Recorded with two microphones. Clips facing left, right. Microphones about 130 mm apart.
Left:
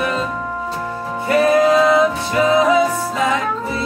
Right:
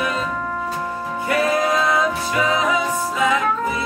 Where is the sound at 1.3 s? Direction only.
25° left (ahead or behind).